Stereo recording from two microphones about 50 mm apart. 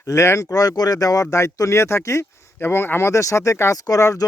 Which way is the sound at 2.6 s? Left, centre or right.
Left.